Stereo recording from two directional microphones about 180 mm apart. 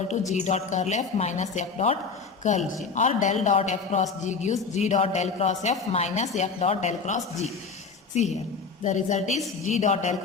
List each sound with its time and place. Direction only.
0.3 s a woman's voice: 40° left (ahead or behind)
8.8 s a man's voice: 45° left (ahead or behind)